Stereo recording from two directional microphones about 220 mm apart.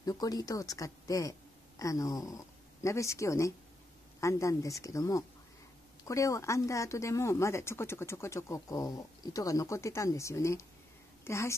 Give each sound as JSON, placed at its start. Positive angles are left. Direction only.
{"t": 0.0, "sound": "speech", "side_deg": 15}